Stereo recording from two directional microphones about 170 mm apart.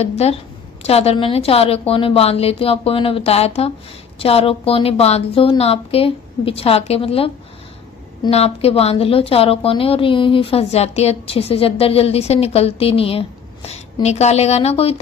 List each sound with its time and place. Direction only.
0.0 s a woman's voice: 40° left (ahead or behind)